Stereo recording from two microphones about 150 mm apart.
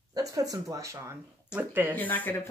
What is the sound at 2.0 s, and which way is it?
Speech, 10° left (ahead or behind).